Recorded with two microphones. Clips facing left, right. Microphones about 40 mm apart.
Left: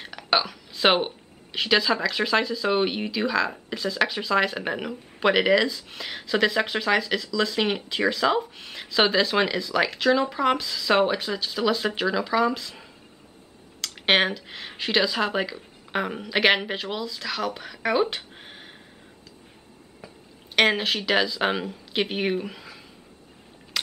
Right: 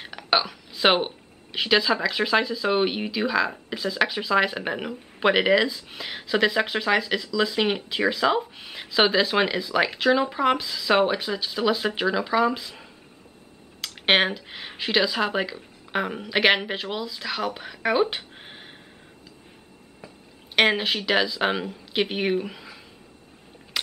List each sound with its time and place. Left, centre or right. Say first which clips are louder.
0.0 s speech: right 1 dB; centre
18.1 s a sound: right 1 dB; centre
20.5 s speech: even; centre